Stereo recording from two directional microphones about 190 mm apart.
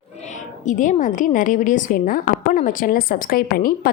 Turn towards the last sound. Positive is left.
turn(degrees=50)  # may be behind; listen again after turning